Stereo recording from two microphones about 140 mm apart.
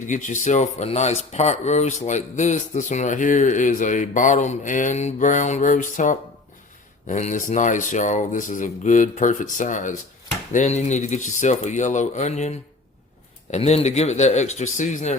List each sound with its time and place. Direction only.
0.1 s speech: 60° left (ahead or behind)